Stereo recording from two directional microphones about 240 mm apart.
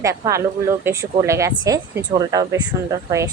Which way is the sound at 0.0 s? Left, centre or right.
Centre.